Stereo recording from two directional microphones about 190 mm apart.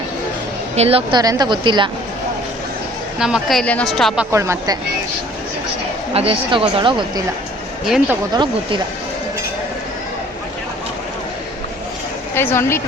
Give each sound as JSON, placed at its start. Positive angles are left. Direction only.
{"t": 0.8, "sound": "a woman's voice", "side_deg": -30}
{"t": 1.2, "sound": "speech", "side_deg": -20}
{"t": 3.2, "sound": "a woman's voice", "side_deg": -5}
{"t": 4.3, "sound": "speech", "side_deg": -15}
{"t": 6.1, "sound": "speech", "side_deg": -30}
{"t": 7.9, "sound": "a woman's voice", "side_deg": -5}
{"t": 8.3, "sound": "speech", "side_deg": -25}
{"t": 12.3, "sound": "speech", "side_deg": 10}